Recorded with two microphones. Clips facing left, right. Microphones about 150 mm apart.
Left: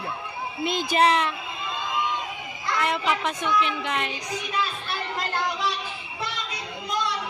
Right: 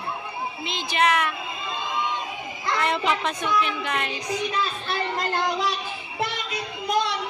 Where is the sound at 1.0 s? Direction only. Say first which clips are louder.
Left 1 dB; 30° left (ahead or behind).